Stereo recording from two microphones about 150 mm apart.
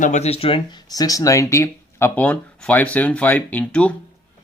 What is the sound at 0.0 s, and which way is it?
Speech, 50° left (ahead or behind).